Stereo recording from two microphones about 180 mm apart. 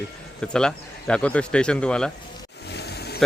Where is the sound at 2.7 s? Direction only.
65° left (ahead or behind).